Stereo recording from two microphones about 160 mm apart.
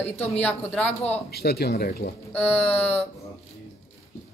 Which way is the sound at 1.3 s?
85° left.